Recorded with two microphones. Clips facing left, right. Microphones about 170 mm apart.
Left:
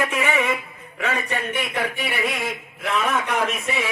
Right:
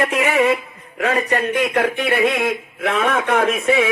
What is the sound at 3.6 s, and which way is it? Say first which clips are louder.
Speech: right 10 dB; 90° right.